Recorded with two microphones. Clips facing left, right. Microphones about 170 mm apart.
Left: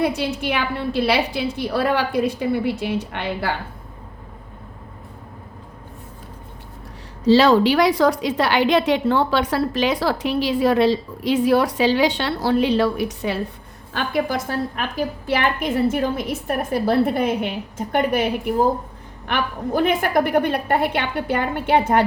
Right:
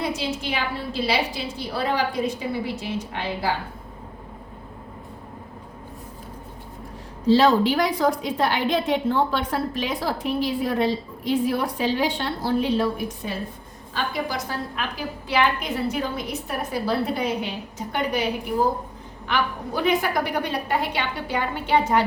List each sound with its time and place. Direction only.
0.0 s a woman's voice: 60° left (ahead or behind)
7.3 s a woman's voice: 80° left
13.9 s a woman's voice: 55° left (ahead or behind)
19.3 s a woman's voice: 50° left (ahead or behind)